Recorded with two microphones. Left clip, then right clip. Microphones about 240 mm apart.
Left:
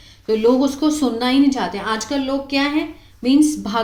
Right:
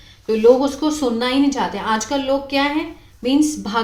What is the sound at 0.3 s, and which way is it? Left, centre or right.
A woman's voice, centre.